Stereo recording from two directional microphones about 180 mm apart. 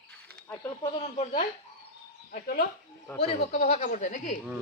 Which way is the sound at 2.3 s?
55° left (ahead or behind).